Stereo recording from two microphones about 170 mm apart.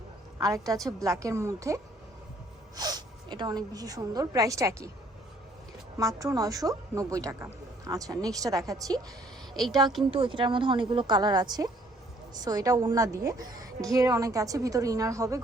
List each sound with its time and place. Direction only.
0.3 s a woman's voice: 20° right (ahead or behind)
6.0 s a woman's voice: 20° right (ahead or behind)
9.6 s a woman's voice: centre (ahead or behind)
10.1 s a woman's voice: 30° right (ahead or behind)